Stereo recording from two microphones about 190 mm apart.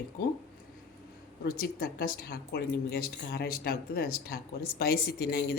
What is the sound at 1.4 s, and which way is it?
Speech, 50° left (ahead or behind).